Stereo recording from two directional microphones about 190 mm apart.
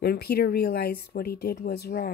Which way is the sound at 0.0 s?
55° left (ahead or behind).